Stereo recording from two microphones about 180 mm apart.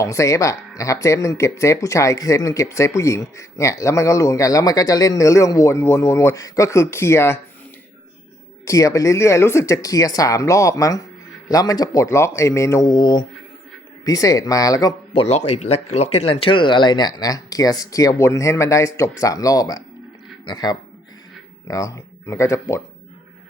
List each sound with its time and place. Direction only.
0.0 s speech: 15° left (ahead or behind)
8.6 s speech: 20° left (ahead or behind)
15.1 s speech: 35° left (ahead or behind); by 22.8 s 15° left (ahead or behind)